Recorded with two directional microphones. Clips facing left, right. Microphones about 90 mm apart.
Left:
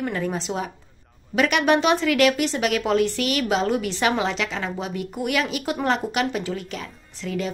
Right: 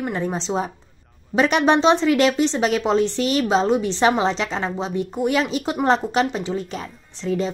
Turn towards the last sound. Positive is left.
turn(degrees=-30)  # may be behind; listen again after turning